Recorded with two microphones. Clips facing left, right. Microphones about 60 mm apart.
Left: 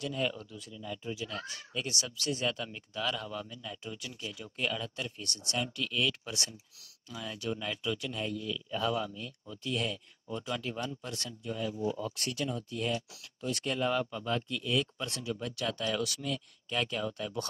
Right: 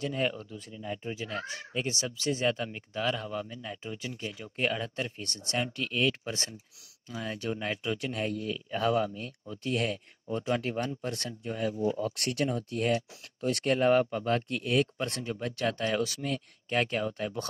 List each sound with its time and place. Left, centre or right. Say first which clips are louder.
0.0 s speech: right 3 dB; right
11.7 s speech: right 4 dB; right
12.0 s speech: right 5 dB; right